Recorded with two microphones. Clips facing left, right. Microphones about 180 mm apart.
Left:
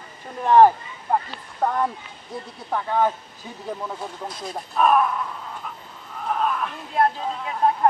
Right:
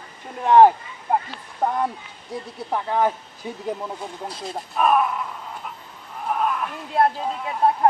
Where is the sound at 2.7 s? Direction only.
10° right (ahead or behind).